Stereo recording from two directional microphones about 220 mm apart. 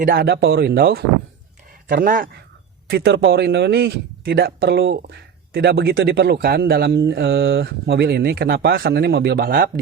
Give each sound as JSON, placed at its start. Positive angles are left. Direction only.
{"t": 0.0, "sound": "speech", "side_deg": -45}